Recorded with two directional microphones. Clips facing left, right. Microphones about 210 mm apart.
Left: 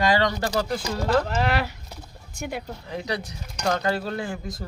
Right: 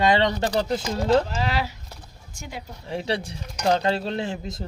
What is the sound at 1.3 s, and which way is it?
Speech, 60° left (ahead or behind).